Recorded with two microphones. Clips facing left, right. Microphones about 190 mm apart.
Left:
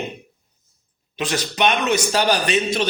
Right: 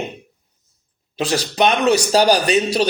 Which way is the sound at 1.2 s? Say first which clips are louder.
Right 3 dB; 35° right (ahead or behind).